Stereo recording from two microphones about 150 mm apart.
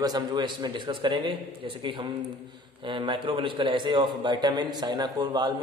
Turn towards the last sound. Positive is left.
turn(degrees=-30)  # may be behind; listen again after turning